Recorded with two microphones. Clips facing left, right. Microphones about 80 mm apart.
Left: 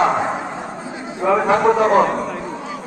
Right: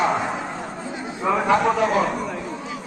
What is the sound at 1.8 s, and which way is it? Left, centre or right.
Speech, left.